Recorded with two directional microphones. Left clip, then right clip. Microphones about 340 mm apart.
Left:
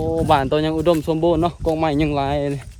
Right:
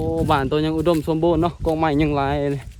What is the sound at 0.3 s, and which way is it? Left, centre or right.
Speech, centre.